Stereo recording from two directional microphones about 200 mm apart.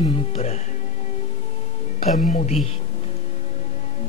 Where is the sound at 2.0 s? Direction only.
45° left (ahead or behind).